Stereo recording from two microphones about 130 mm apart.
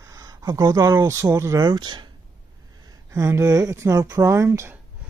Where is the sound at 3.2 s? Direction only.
25° right (ahead or behind).